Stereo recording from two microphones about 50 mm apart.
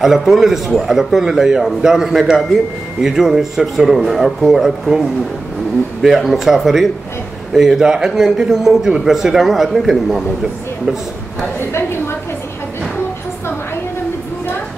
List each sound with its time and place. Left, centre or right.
0.0 s a man's voice: centre
6.0 s a man's voice: centre
11.7 s a sound: left